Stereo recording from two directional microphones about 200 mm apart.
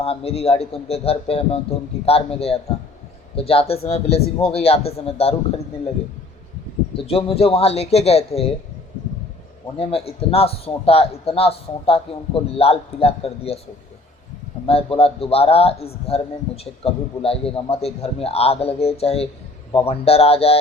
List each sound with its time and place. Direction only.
0.0 s a man's voice: 30° left (ahead or behind)
6.9 s a man's voice: 30° left (ahead or behind)
9.7 s a man's voice: 30° left (ahead or behind)
14.7 s a man's voice: 30° left (ahead or behind)